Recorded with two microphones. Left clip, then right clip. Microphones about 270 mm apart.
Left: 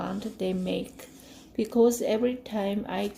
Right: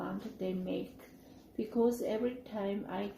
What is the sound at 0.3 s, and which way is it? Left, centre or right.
Speech, left.